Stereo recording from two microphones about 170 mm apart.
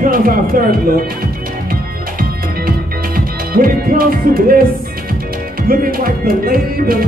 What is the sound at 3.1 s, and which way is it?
Music, 60° right (ahead or behind).